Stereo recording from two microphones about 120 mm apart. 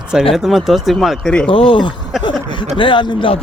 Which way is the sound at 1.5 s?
50° left (ahead or behind).